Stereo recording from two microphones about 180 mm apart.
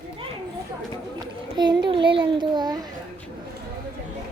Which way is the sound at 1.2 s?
25° right (ahead or behind).